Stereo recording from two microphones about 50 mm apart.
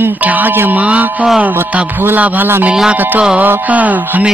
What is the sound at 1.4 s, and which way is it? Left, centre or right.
Speech, right.